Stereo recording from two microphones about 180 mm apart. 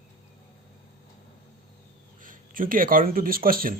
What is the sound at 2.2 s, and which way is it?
Speech, 50° right (ahead or behind).